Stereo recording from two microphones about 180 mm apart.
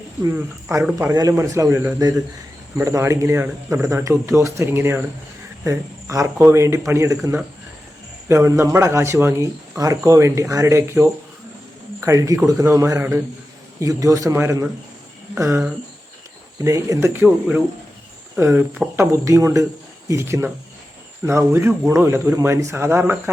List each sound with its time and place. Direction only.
0.2 s a man's voice: 15° right (ahead or behind)
8.3 s a man's voice: 15° right (ahead or behind)